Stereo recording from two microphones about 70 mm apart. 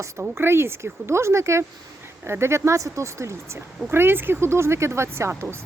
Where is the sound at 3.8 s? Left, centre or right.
Right.